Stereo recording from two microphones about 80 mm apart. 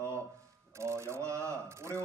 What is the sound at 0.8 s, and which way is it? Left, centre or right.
A man's voice, right.